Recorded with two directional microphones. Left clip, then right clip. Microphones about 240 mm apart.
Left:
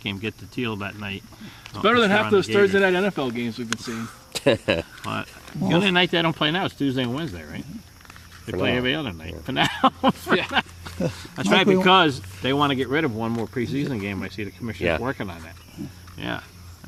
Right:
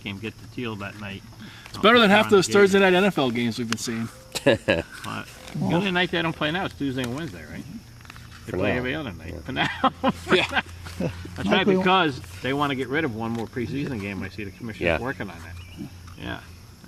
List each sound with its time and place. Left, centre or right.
0.0 s speech: left
1.7 s speech: right
4.3 s speech: centre
5.0 s speech: left
8.8 s speech: left
10.5 s a sound: left
11.2 s speech: left
14.8 s speech: centre
15.0 s speech: left
16.2 s speech: left